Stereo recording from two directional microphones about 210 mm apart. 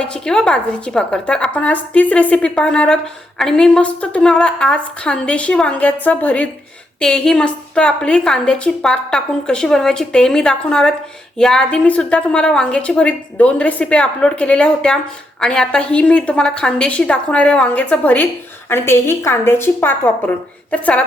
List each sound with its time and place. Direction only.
0.0 s a woman's voice: 5° left (ahead or behind)